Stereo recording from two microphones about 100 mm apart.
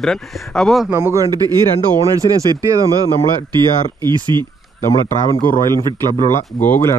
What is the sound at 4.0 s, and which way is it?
Speech, 45° right (ahead or behind).